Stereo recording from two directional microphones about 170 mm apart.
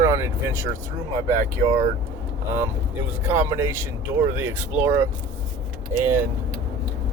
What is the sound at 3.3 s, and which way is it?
Speech, 15° right (ahead or behind).